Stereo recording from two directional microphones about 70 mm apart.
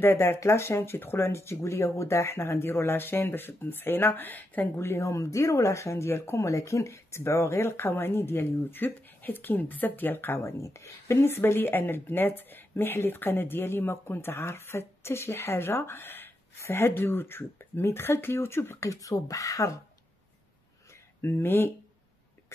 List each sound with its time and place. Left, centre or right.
0.0 s speech: left
4.8 s speech: left
10.4 s speech: left
18.9 s speech: left
21.2 s speech: left